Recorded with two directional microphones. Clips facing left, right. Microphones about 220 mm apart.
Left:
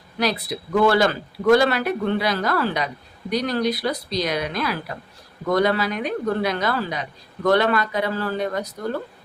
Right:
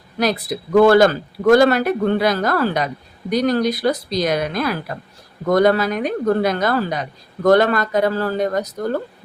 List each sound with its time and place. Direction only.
0.2 s speech: 45° right (ahead or behind)